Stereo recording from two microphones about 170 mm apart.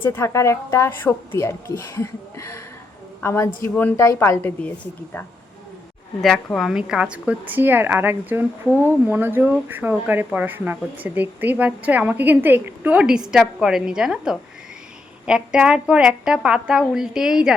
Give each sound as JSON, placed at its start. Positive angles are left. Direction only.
{"t": 0.0, "sound": "a woman's voice", "side_deg": 15}
{"t": 6.2, "sound": "a woman's voice", "side_deg": 0}